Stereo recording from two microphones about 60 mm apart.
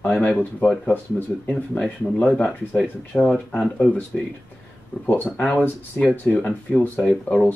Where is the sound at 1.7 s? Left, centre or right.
Centre.